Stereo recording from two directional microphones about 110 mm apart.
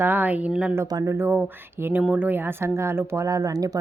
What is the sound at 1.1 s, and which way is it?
A woman's voice, 15° right (ahead or behind).